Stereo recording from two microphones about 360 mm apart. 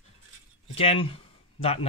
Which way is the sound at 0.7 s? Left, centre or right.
Centre.